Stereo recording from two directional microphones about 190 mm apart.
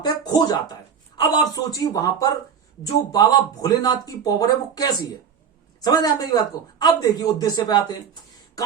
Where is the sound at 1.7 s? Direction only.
20° left (ahead or behind).